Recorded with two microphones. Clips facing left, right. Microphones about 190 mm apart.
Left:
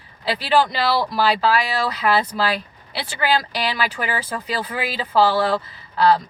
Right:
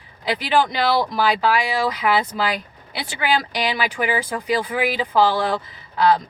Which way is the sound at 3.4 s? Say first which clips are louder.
Right 1 dB; 20° right (ahead or behind).